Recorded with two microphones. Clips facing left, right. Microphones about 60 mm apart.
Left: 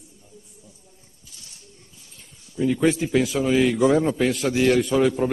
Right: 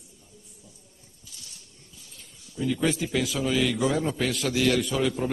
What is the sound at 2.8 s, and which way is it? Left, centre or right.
A man's voice, left.